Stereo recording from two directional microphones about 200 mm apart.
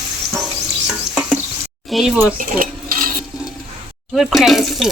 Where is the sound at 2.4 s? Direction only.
45° right (ahead or behind).